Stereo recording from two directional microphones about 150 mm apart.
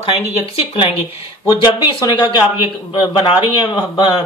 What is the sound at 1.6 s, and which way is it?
Speech, 30° left (ahead or behind).